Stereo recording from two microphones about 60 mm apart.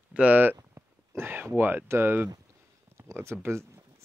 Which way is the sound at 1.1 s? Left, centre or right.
Right.